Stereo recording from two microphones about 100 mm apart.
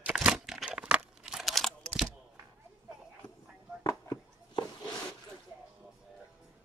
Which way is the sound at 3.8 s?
30° left (ahead or behind).